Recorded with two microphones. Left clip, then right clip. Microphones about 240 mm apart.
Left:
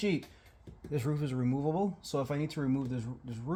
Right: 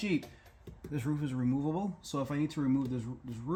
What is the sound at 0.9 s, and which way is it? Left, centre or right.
Speech, left.